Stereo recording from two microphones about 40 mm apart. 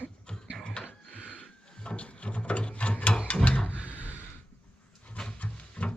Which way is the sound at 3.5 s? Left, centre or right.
Left.